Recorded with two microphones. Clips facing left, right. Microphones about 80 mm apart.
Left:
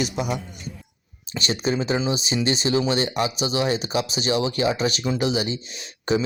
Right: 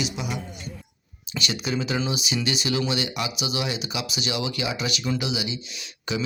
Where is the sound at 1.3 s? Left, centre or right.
Left.